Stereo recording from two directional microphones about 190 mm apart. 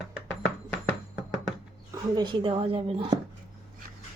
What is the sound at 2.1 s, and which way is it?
Speech, 25° right (ahead or behind).